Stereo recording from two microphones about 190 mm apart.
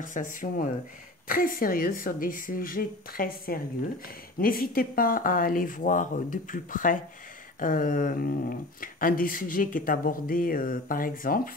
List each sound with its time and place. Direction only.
0.0 s speech: 45° left (ahead or behind)